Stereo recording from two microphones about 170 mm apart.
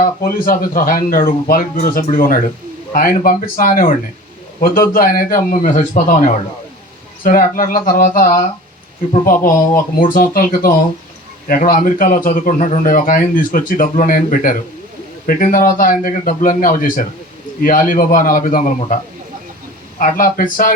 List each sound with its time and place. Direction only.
0.0 s a man's voice: 55° left (ahead or behind)
20.0 s a man's voice: 55° left (ahead or behind)